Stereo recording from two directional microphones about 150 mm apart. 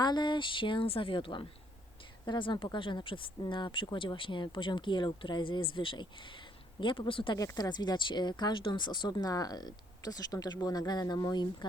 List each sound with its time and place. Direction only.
0.0 s speech: 30° left (ahead or behind)
7.3 s speech: 25° left (ahead or behind)